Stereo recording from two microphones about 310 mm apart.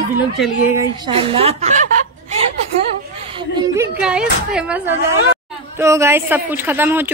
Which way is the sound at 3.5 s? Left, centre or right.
Centre.